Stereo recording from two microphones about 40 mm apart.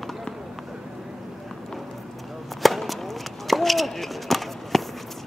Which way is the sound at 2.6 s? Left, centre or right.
Centre.